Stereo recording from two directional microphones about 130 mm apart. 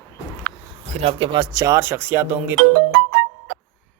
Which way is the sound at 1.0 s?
50° right (ahead or behind).